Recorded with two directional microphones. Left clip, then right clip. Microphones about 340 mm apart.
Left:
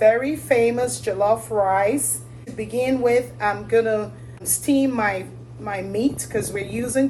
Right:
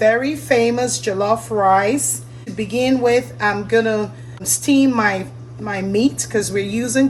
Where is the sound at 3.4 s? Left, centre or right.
Right.